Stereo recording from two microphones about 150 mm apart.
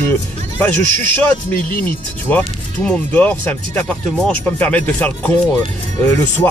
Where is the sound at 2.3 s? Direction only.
10° left (ahead or behind).